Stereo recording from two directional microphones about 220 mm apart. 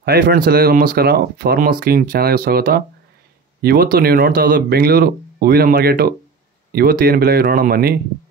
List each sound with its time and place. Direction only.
0.0 s speech: 45° right (ahead or behind)